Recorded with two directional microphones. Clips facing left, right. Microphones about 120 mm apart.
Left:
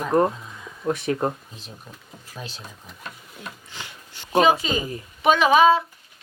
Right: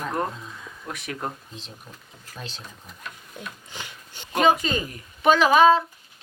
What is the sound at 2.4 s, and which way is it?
Speech, 5° left (ahead or behind).